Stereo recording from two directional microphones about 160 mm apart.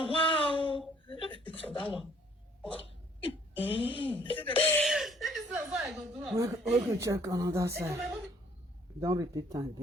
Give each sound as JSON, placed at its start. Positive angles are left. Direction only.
{"t": 0.0, "sound": "a sound", "side_deg": 35}
{"t": 3.2, "sound": "speech", "side_deg": 35}
{"t": 4.6, "sound": "speech", "side_deg": 10}
{"t": 4.9, "sound": "chuckle", "side_deg": 0}
{"t": 5.5, "sound": "a woman's voice", "side_deg": -5}
{"t": 6.3, "sound": "a woman's voice", "side_deg": -20}